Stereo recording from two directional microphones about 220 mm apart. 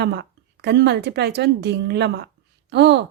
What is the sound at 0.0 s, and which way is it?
A woman's voice, 50° right (ahead or behind).